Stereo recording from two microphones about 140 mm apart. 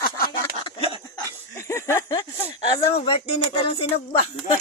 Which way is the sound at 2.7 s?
45° left (ahead or behind).